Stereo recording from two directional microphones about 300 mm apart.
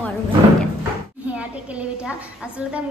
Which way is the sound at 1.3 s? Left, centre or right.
Centre.